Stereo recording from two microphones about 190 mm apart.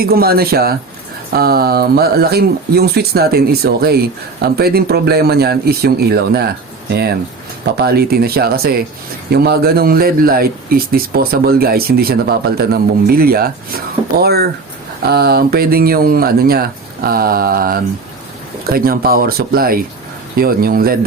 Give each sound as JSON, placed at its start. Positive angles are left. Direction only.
{"t": 0.0, "sound": "speech", "side_deg": -55}